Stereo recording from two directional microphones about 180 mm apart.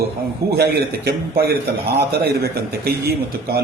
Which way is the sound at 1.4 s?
65° right (ahead or behind).